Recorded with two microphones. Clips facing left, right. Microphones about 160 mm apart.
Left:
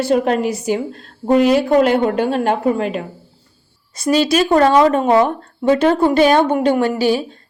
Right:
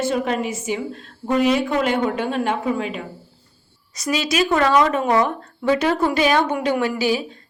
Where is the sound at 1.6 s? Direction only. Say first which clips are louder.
Left 7 dB; 40° left (ahead or behind); by 3.0 s 55° left (ahead or behind).